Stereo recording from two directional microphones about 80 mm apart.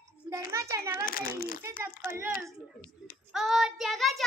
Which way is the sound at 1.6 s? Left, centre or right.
Right.